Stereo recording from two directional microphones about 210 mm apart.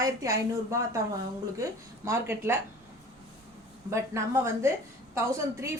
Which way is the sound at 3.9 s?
15° right (ahead or behind).